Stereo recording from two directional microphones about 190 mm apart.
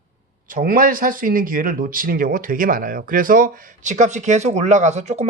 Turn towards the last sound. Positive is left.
turn(degrees=-35)  # may be behind; listen again after turning